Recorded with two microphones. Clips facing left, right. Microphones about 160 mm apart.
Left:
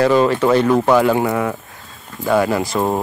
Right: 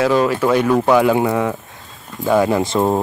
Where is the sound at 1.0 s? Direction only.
15° right (ahead or behind).